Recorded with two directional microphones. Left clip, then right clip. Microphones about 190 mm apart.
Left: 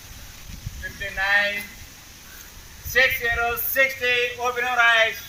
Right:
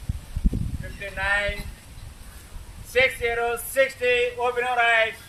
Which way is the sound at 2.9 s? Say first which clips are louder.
Left 2 dB; 45° right (ahead or behind).